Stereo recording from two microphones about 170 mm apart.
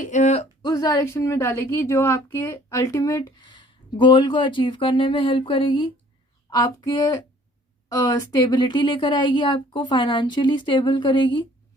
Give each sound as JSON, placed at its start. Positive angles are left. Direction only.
{"t": 0.0, "sound": "speech", "side_deg": 45}
{"t": 0.6, "sound": "a woman's voice", "side_deg": 20}